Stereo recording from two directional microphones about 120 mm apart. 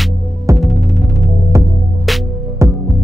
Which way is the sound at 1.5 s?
25° right (ahead or behind).